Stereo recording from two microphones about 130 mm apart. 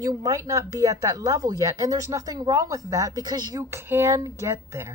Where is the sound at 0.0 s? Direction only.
30° right (ahead or behind).